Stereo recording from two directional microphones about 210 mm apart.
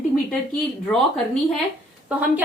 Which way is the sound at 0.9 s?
5° left (ahead or behind).